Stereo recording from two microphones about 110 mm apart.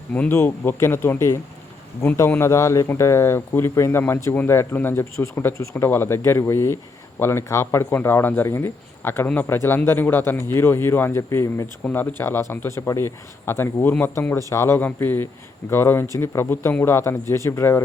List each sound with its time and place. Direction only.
0.1 s speech: 15° left (ahead or behind)